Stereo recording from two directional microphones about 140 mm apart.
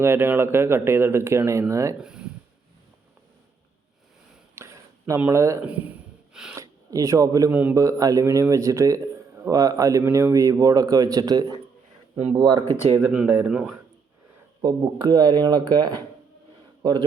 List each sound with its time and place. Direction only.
0.0 s speech: 15° right (ahead or behind)
2.0 s a sound: 5° right (ahead or behind)
4.5 s a sound: 20° right (ahead or behind)
6.5 s speech: 20° right (ahead or behind)
12.9 s speech: 10° right (ahead or behind)
14.6 s speech: 30° right (ahead or behind)